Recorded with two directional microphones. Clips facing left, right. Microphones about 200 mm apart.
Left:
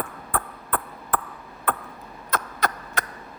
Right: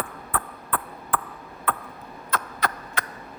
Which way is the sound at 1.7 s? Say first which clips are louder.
Left 1 dB; 45° left (ahead or behind).